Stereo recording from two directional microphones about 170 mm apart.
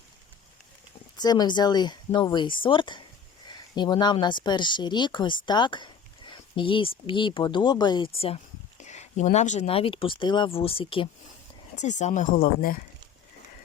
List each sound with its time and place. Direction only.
1.1 s speech: 25° left (ahead or behind)
5.5 s a sound: 25° left (ahead or behind)
7.1 s speech: 30° left (ahead or behind)
11.8 s speech: 45° left (ahead or behind)